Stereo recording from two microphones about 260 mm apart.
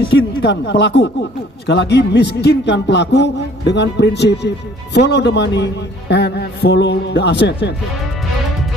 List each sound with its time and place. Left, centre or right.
0.4 s speech: left